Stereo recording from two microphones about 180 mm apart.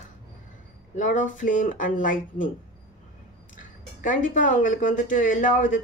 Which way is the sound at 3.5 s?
45° left (ahead or behind).